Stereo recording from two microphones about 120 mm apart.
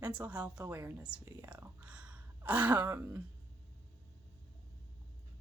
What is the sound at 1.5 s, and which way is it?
Speech, 10° right (ahead or behind).